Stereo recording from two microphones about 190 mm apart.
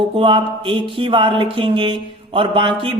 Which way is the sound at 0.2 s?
25° right (ahead or behind).